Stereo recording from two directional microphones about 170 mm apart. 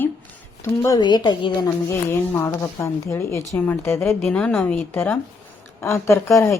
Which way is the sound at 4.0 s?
Centre (ahead or behind).